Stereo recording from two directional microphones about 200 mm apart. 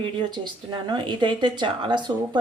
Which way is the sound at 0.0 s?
20° right (ahead or behind).